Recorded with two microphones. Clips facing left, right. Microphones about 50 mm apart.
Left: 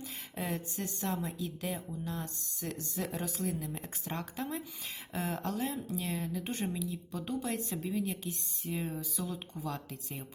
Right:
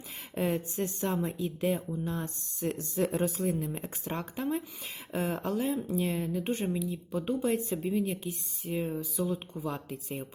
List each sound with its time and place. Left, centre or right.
0.3 s speech: right